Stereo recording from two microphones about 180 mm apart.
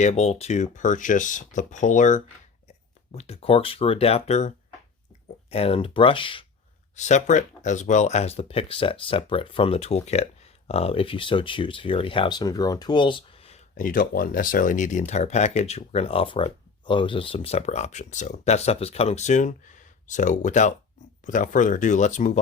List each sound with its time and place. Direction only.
0.0 s speech: 35° left (ahead or behind)
6.9 s speech: 40° left (ahead or behind)
13.7 s speech: 50° left (ahead or behind)